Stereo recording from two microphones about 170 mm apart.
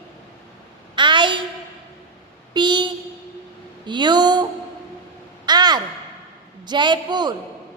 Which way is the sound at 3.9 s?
25° right (ahead or behind).